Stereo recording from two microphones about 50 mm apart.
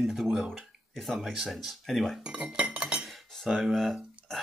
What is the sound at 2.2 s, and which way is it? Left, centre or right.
Chink, centre.